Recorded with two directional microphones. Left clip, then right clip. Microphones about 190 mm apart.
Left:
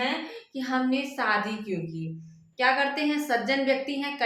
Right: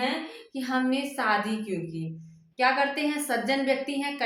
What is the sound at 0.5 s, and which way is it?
A woman's voice, 15° right (ahead or behind).